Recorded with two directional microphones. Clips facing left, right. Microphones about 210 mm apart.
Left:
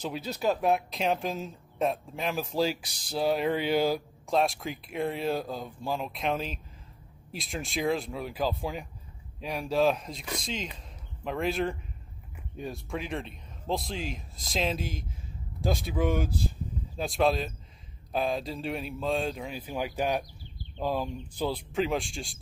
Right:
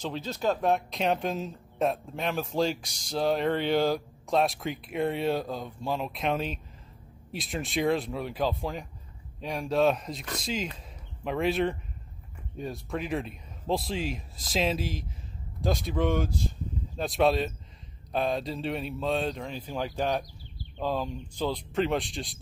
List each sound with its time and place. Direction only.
0.0 s speech: 10° left (ahead or behind)